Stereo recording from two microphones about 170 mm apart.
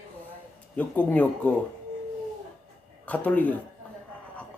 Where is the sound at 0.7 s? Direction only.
10° left (ahead or behind).